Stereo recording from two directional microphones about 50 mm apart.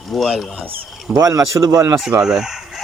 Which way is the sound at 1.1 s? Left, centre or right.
Right.